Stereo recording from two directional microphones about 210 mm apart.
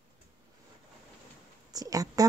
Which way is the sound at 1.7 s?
15° right (ahead or behind).